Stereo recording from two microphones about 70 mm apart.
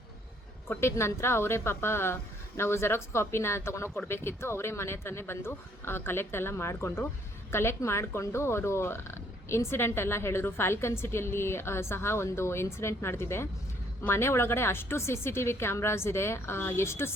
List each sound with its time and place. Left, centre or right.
0.7 s speech: left